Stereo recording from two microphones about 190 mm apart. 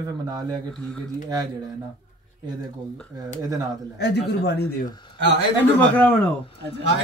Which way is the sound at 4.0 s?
60° left (ahead or behind).